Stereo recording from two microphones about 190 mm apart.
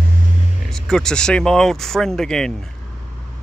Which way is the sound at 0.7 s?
5° left (ahead or behind).